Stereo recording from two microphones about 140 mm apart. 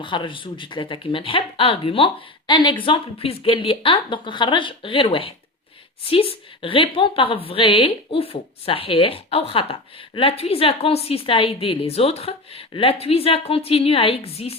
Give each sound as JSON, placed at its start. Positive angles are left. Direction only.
{"t": 0.0, "sound": "a woman's voice", "side_deg": 35}